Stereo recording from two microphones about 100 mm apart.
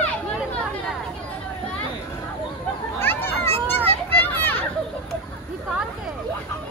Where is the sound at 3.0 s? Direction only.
20° left (ahead or behind).